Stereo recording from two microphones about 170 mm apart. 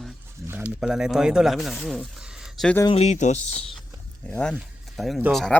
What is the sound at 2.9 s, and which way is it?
Speech, 40° left (ahead or behind).